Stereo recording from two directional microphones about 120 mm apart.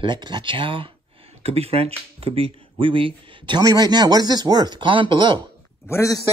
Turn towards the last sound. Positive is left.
turn(degrees=25)  # may be behind; listen again after turning